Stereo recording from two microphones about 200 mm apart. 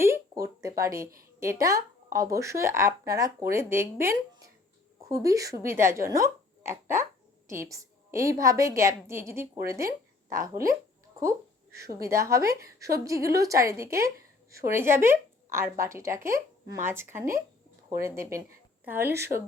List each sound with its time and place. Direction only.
0.0 s a woman's voice: 15° right (ahead or behind)
11.9 s a woman's voice: 15° right (ahead or behind)